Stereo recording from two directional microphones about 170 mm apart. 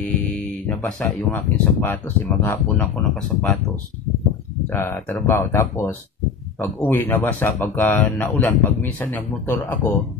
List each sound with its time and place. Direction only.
0.0 s speech: 5° left (ahead or behind)
4.6 s speech: 15° left (ahead or behind)